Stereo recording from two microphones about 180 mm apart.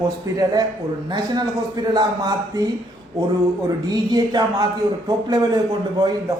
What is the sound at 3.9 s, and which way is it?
Speech, 20° right (ahead or behind).